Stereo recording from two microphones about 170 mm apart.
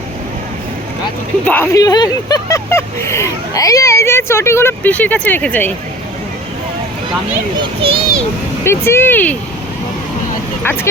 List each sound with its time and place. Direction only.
1.5 s speech: 15° left (ahead or behind)
7.6 s a child's voice: 30° right (ahead or behind)
8.6 s speech: 15° left (ahead or behind)